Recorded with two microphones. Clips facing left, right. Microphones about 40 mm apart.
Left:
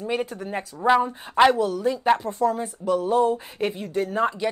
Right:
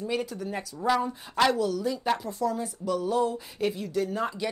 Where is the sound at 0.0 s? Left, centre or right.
Left.